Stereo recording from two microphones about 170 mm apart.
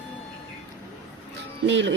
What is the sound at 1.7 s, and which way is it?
Speech, 90° right.